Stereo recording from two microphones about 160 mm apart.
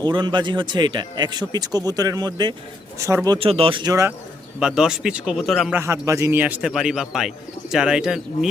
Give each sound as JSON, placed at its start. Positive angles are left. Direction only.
{"t": 0.0, "sound": "speech", "side_deg": -30}
{"t": 3.4, "sound": "speech", "side_deg": -35}
{"t": 4.6, "sound": "speech", "side_deg": -5}
{"t": 5.7, "sound": "speech", "side_deg": -15}